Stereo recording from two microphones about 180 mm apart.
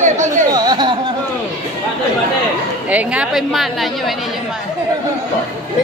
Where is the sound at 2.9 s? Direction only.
5° right (ahead or behind).